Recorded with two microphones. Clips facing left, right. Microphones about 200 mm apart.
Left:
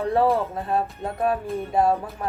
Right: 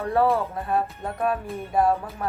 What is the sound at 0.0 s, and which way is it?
Speech, 30° left (ahead or behind).